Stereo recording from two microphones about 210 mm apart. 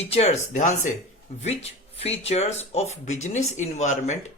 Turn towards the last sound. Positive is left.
turn(degrees=35)  # may be behind; listen again after turning